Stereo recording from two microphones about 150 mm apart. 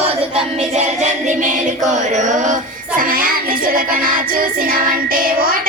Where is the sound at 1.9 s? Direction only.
55° right (ahead or behind).